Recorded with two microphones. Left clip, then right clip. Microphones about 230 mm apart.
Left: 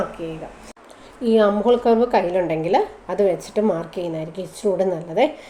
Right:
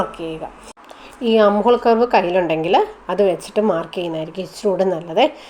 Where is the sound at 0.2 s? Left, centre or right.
Right.